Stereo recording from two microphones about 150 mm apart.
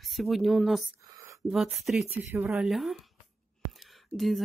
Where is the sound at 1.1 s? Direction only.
20° right (ahead or behind).